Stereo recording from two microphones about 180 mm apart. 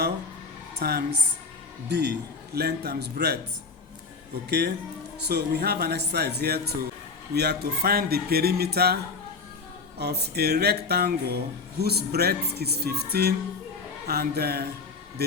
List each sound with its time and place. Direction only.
0.8 s speech: 60° right (ahead or behind)
4.4 s speech: 65° right (ahead or behind)
10.0 s speech: 65° right (ahead or behind)